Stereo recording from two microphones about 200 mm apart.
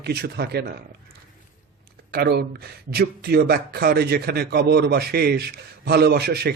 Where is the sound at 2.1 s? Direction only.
50° right (ahead or behind).